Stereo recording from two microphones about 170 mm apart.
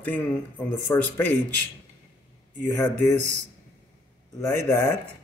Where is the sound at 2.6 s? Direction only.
15° left (ahead or behind).